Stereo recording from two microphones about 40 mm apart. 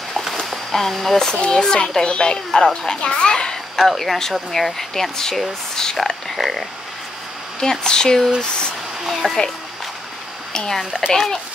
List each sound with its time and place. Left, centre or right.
0.1 s a sound: centre
0.5 s a child's voice: centre
7.8 s a child's voice: centre
9.0 s speech: centre
10.7 s a child's voice: centre